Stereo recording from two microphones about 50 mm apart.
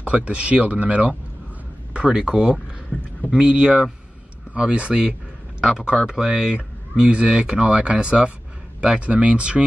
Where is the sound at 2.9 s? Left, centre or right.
Left.